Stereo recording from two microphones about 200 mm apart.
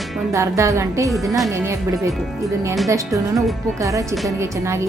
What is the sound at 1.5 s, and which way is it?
Speech, 15° right (ahead or behind).